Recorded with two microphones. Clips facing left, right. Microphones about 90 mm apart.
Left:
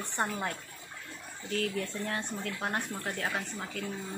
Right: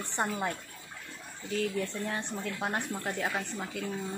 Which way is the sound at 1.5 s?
15° right (ahead or behind).